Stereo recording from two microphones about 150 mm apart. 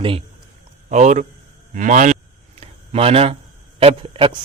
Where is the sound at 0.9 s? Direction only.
50° right (ahead or behind).